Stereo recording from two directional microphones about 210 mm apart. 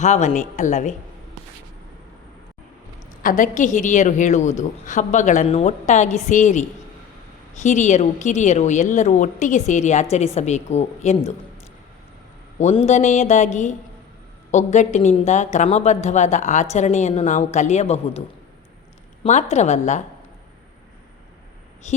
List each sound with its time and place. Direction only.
0.0 s a woman's voice: 35° left (ahead or behind)
3.2 s a woman's voice: 40° left (ahead or behind)
12.5 s a woman's voice: 30° left (ahead or behind)
19.2 s a woman's voice: 30° left (ahead or behind)